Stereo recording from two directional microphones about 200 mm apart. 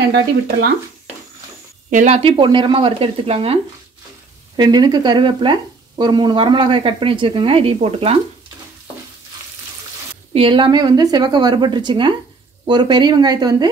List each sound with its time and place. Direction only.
1.9 s speech: 40° right (ahead or behind)
4.6 s speech: 20° right (ahead or behind)
10.3 s speech: 25° right (ahead or behind)